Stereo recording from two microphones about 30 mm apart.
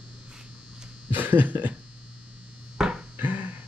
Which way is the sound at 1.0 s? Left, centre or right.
Right.